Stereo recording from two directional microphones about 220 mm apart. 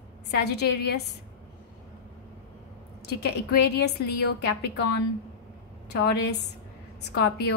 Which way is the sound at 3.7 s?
50° left (ahead or behind).